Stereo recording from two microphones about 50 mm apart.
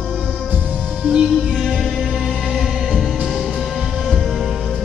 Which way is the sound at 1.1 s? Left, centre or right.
Centre.